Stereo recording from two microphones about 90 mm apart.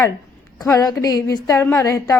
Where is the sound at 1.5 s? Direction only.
30° left (ahead or behind).